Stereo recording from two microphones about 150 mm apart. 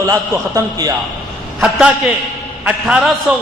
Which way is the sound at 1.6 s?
5° right (ahead or behind).